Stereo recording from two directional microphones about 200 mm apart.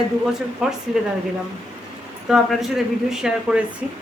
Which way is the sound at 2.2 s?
Centre (ahead or behind).